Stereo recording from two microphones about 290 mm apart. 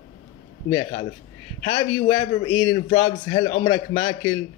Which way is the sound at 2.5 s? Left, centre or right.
Left.